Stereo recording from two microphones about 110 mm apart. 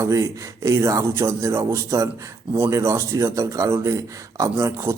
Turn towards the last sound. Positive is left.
turn(degrees=-25)  # may be behind; listen again after turning